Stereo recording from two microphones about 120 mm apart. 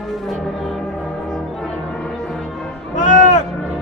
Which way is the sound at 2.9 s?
90° left.